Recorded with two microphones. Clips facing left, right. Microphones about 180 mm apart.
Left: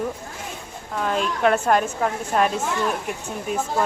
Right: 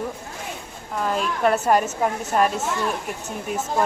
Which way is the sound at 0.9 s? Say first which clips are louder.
Even; centre (ahead or behind).